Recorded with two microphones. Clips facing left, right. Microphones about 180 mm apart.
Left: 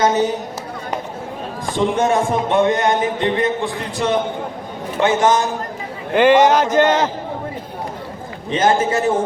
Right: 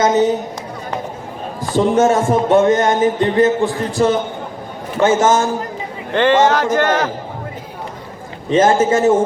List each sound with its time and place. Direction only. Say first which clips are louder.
1.7 s a man's voice: right 4 dB; 40° right (ahead or behind)
6.1 s a man's voice: left 1 dB; 15° left (ahead or behind)
8.4 s a man's voice: right 4 dB; 25° right (ahead or behind)